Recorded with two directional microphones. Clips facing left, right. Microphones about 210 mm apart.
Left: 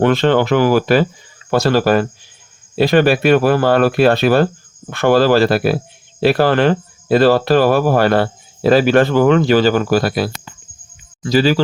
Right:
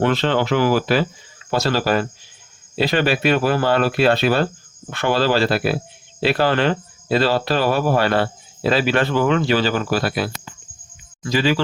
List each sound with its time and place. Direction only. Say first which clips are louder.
0.0 s speech: left 5 dB; 50° left (ahead or behind)